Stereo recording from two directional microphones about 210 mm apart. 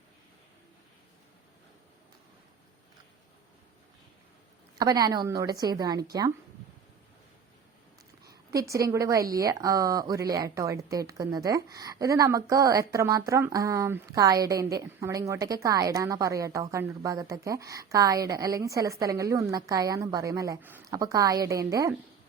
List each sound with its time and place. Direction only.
4.8 s a woman's voice: 15° right (ahead or behind)
8.5 s a woman's voice: 15° right (ahead or behind)